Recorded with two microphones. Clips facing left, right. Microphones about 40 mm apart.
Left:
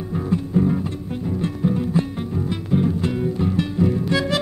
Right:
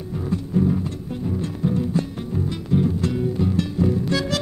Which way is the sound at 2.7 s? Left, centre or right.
Centre.